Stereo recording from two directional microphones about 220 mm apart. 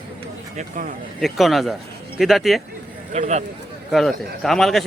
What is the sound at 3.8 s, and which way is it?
Speech, centre (ahead or behind).